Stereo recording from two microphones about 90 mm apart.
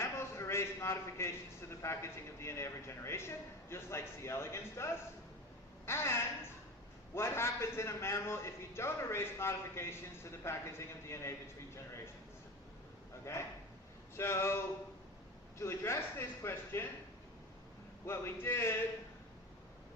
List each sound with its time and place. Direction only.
0.0 s a sound: 30° left (ahead or behind)
1.8 s a man's voice: 30° left (ahead or behind)
13.3 s a man's voice: 30° left (ahead or behind)
18.0 s a man's voice: 30° left (ahead or behind)